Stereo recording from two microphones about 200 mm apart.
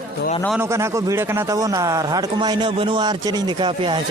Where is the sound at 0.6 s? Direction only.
15° right (ahead or behind).